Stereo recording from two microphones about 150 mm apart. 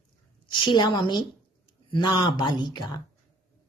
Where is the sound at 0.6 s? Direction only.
30° left (ahead or behind).